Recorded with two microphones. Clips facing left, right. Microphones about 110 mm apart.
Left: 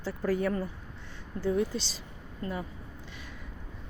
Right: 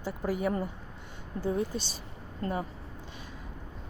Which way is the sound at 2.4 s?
35° right (ahead or behind).